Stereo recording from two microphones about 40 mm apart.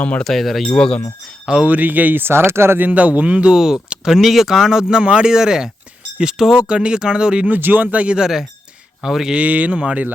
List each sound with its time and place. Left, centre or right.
0.0 s speech: left
0.3 s speech: centre
0.7 s speech: left
1.6 s speech: right
2.2 s speech: right
2.7 s speech: right
3.5 s speech: centre
5.0 s speech: right
5.3 s speech: centre
7.6 s speech: right
8.2 s speech: centre
9.3 s speech: right